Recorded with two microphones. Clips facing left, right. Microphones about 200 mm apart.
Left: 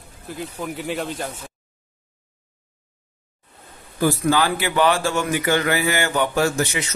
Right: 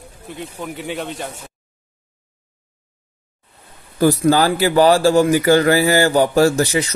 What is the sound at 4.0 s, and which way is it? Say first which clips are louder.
A man's voice: right 5 dB; 40° right (ahead or behind).